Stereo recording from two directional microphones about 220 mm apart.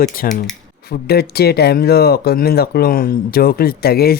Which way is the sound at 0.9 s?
45° left (ahead or behind).